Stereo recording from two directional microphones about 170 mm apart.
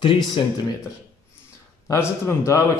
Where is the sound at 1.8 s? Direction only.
15° left (ahead or behind).